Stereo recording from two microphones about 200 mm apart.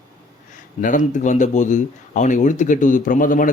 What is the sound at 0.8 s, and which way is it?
Speech, 40° left (ahead or behind).